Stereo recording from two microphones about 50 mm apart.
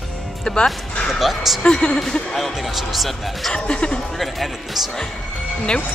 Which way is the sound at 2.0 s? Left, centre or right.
Centre.